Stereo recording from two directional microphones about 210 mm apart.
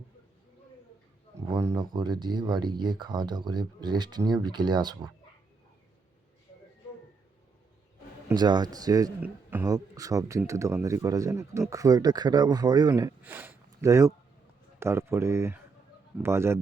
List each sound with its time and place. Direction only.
1.4 s speech: 15° right (ahead or behind)
8.3 s speech: 20° right (ahead or behind)